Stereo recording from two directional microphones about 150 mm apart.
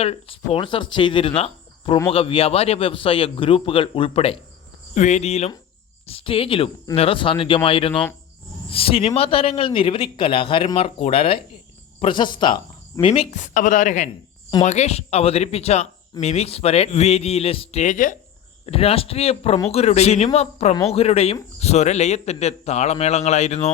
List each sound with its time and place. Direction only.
0.0 s a man's voice: 40° left (ahead or behind)
4.9 s a man's voice: 50° left (ahead or behind)
13.3 s a man's voice: 55° left (ahead or behind)
18.6 s a man's voice: 40° left (ahead or behind)